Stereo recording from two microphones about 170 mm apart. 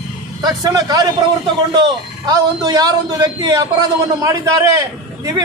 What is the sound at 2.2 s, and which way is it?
A man's voice, 20° right (ahead or behind).